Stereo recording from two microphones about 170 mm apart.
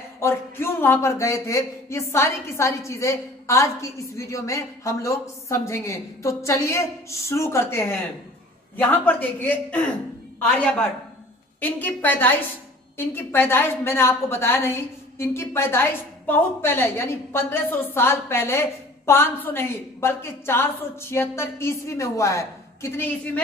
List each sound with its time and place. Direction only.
0.2 s a woman's voice: 15° left (ahead or behind)